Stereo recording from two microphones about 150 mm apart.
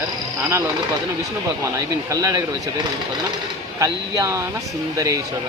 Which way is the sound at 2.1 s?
25° right (ahead or behind).